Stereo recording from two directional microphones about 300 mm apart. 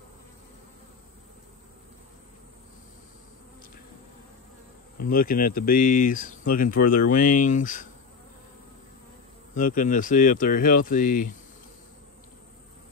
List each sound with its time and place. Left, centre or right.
5.0 s speech: left
9.6 s speech: left